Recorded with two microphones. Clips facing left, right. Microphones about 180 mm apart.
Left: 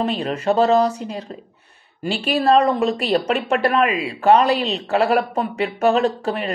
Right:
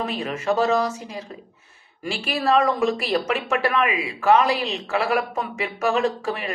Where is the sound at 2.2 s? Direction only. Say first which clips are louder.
Left 4 dB; 30° left (ahead or behind).